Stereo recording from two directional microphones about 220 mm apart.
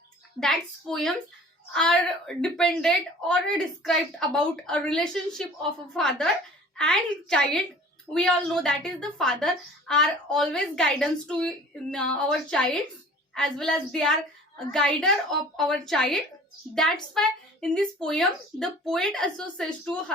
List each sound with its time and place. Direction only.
0.3 s a woman's voice: centre (ahead or behind)